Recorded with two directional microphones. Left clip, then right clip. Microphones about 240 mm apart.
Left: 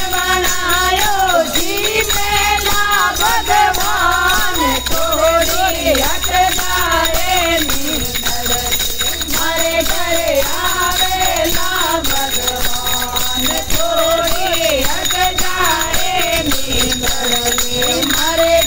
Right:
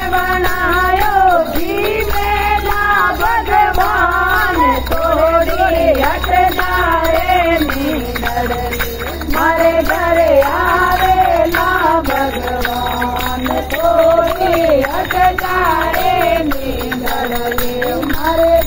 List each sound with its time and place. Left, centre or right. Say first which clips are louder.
2.9 s music: right 3 dB; left